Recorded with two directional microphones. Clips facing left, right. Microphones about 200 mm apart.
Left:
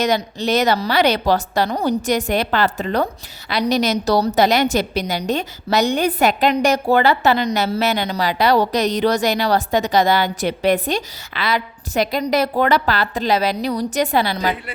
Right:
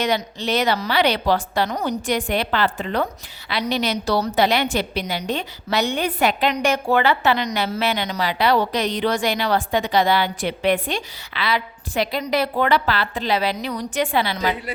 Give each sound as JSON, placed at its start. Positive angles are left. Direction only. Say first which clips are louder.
{"t": 0.0, "sound": "a woman's voice", "louder": "left 3 dB", "side_deg": 40}